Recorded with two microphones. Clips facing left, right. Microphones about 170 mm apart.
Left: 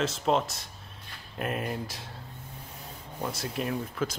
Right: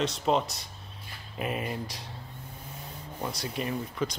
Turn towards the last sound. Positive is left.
turn(degrees=0)  # may be behind; listen again after turning